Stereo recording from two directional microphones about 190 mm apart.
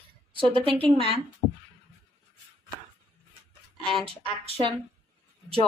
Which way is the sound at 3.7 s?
30° right (ahead or behind).